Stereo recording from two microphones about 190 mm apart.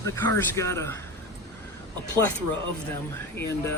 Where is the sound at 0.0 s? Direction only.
15° left (ahead or behind).